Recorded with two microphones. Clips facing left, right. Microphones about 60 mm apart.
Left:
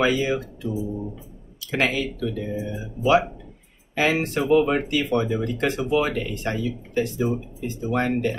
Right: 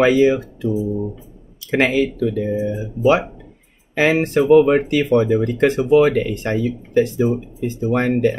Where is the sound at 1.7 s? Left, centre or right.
Right.